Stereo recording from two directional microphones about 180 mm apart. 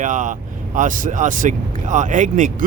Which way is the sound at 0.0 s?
45° right (ahead or behind).